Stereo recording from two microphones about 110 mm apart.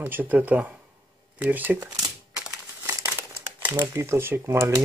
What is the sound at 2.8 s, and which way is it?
Crumpling, 25° right (ahead or behind).